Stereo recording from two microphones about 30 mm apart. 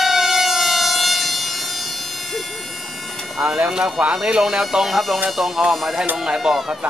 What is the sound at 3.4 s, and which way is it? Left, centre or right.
Speech, right.